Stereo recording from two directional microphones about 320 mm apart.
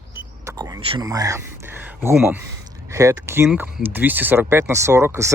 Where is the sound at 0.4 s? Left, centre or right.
Centre.